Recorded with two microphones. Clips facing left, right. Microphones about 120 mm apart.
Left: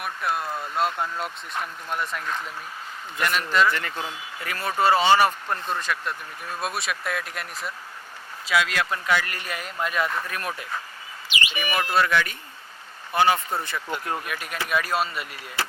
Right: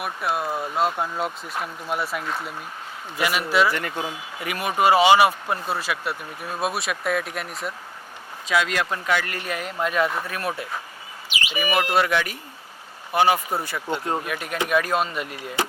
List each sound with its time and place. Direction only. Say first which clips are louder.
0.0 s speech: right 2 dB; 5° right (ahead or behind); by 14.2 s 25° right (ahead or behind)
14.3 s speech: right 4 dB; 15° right (ahead or behind)